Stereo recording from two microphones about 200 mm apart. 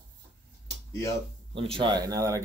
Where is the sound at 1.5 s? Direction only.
25° right (ahead or behind).